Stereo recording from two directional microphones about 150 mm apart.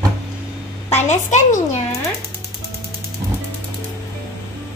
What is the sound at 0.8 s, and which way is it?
Speech, 45° left (ahead or behind).